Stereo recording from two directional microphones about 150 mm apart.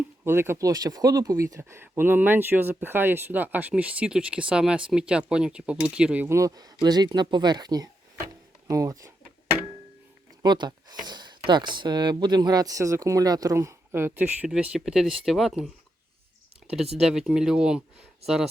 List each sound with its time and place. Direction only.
0.3 s speech: 15° right (ahead or behind)
10.4 s speech: 30° right (ahead or behind); by 15.7 s centre (ahead or behind)
17.0 s speech: 5° right (ahead or behind)